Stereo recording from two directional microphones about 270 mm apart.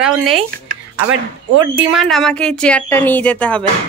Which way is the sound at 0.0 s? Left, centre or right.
Centre.